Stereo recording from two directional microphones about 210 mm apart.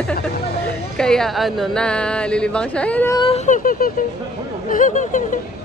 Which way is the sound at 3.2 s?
30° left (ahead or behind).